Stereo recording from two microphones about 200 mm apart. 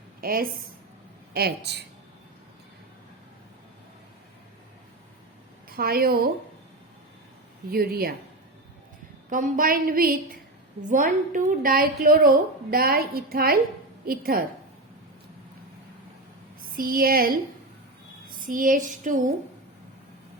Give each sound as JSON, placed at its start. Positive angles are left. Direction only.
{"t": 0.2, "sound": "a woman's voice", "side_deg": -45}
{"t": 5.6, "sound": "a woman's voice", "side_deg": -50}
{"t": 7.7, "sound": "a woman's voice", "side_deg": -50}
{"t": 9.3, "sound": "a woman's voice", "side_deg": -45}
{"t": 16.7, "sound": "a woman's voice", "side_deg": -45}